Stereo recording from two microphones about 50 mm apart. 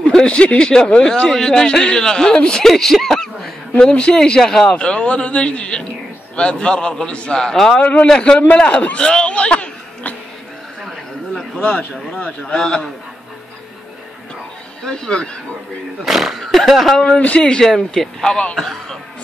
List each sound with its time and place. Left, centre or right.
0.1 s speech: centre
3.8 s speech: centre
4.7 s a man's voice: left
7.5 s speech: centre
7.8 s a man's voice: left
8.1 s a man's voice: centre
8.9 s a sound: centre
11.6 s a man's voice: left
14.8 s speech: centre
16.1 s speech: centre
17.4 s speech: centre